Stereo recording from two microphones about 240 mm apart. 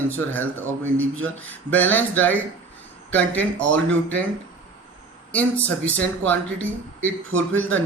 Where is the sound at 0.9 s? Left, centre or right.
Right.